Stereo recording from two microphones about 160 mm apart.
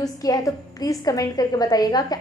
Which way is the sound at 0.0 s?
25° left (ahead or behind).